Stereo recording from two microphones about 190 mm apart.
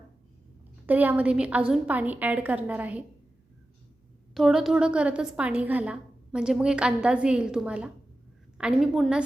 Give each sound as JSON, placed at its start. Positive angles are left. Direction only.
{"t": 0.9, "sound": "a woman's voice", "side_deg": -10}
{"t": 4.4, "sound": "a woman's voice", "side_deg": 0}